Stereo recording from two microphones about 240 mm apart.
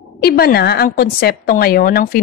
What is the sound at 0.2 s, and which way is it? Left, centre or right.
Speech, left.